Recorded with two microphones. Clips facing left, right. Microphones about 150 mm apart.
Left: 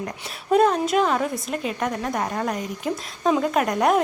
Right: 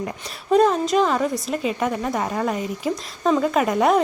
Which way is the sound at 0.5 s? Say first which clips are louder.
Right 1 dB; 5° left (ahead or behind).